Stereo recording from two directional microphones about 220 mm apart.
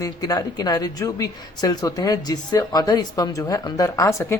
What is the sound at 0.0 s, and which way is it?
Speech, 15° left (ahead or behind).